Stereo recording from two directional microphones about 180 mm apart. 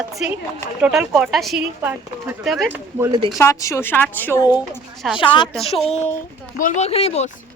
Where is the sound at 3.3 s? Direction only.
15° left (ahead or behind).